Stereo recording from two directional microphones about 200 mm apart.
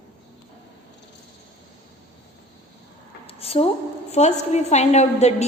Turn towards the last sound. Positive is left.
turn(degrees=35)  # may be behind; listen again after turning